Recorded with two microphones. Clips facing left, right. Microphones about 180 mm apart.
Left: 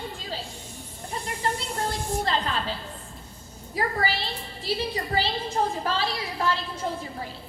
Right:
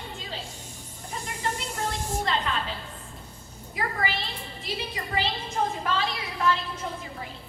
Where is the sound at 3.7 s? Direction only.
35° left (ahead or behind).